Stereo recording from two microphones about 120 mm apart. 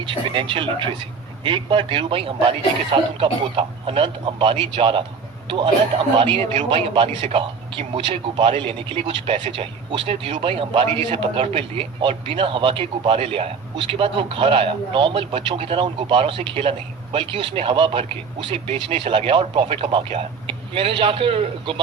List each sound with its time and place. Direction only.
0.0 s a man's voice: 45° right (ahead or behind)
19.9 s a man's voice: 45° right (ahead or behind)